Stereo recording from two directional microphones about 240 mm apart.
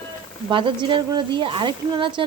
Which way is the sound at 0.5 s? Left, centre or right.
Centre.